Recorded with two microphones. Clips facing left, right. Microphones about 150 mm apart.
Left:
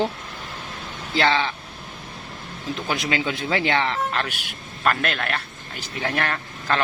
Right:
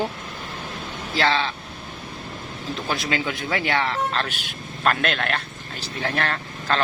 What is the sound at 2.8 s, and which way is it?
Speech, 20° left (ahead or behind).